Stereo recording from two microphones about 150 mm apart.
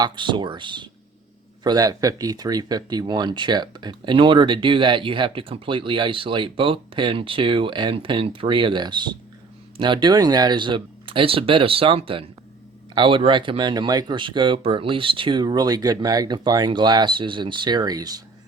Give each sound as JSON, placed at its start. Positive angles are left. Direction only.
{"t": 0.0, "sound": "speech", "side_deg": -30}